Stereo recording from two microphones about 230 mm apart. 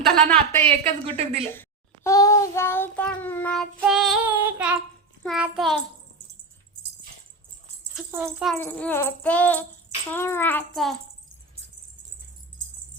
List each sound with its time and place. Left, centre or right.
0.0 s child singing: centre
0.9 s a woman's voice: right
2.0 s child singing: centre
7.9 s speech: centre
8.4 s speech: centre